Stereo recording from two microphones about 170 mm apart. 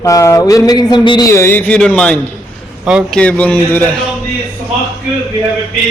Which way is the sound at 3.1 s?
10° left (ahead or behind).